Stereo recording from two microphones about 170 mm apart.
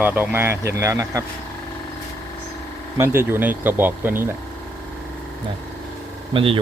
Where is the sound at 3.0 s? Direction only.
15° right (ahead or behind).